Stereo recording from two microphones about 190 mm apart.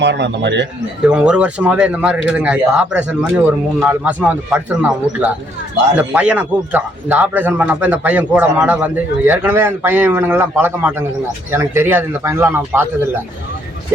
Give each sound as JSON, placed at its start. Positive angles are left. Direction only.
{"t": 0.0, "sound": "speech", "side_deg": -65}
{"t": 1.0, "sound": "speech", "side_deg": -5}